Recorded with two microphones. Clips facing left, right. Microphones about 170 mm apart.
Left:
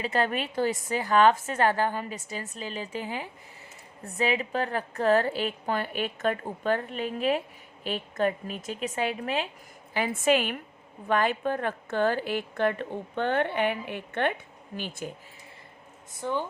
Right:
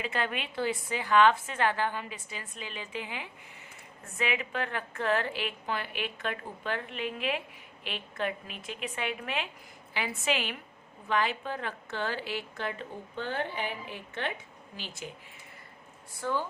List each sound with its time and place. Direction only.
0.0 s a woman's voice: 40° left (ahead or behind)
16.2 s a woman's voice: 20° left (ahead or behind)